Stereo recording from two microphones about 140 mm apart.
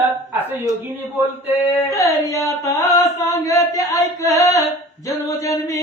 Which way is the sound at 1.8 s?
20° left (ahead or behind).